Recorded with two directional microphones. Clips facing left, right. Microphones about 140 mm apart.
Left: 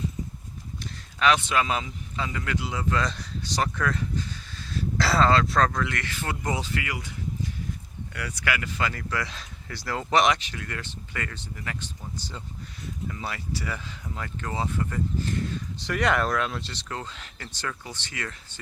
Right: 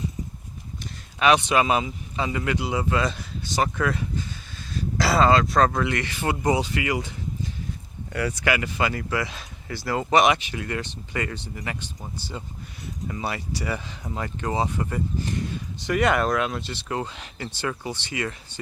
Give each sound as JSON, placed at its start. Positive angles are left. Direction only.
{"t": 1.2, "sound": "speech", "side_deg": -15}
{"t": 4.5, "sound": "a sound", "side_deg": -5}
{"t": 5.7, "sound": "speech", "side_deg": -20}
{"t": 8.1, "sound": "speech", "side_deg": -25}
{"t": 13.1, "sound": "speech", "side_deg": -15}
{"t": 15.9, "sound": "speech", "side_deg": -5}
{"t": 16.9, "sound": "speech", "side_deg": -15}